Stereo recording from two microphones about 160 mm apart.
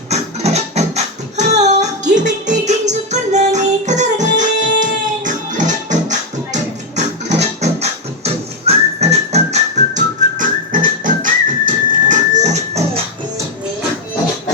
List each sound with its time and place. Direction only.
0.1 s music: 45° right (ahead or behind)